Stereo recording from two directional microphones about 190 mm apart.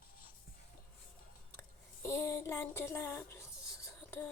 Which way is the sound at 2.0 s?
15° left (ahead or behind).